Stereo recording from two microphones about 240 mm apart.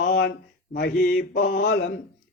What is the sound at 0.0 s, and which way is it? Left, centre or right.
Mantra, left.